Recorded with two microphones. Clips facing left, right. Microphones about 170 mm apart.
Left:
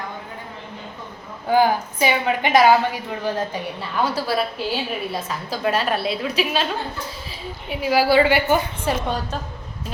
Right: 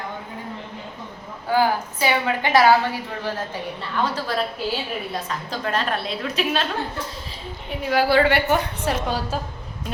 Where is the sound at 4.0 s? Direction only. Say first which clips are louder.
Left 2 dB; 10° left (ahead or behind).